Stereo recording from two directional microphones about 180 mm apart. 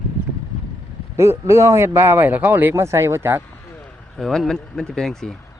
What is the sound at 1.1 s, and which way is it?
Speech, 15° right (ahead or behind).